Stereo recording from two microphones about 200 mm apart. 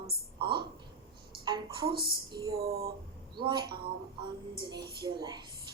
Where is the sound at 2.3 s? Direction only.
20° right (ahead or behind).